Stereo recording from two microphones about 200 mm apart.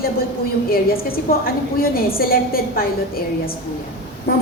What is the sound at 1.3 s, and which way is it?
A woman's voice, 45° left (ahead or behind).